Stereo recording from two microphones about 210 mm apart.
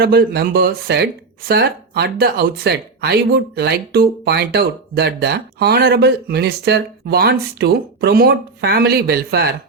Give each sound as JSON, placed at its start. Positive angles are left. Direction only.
{"t": 0.0, "sound": "speech", "side_deg": -45}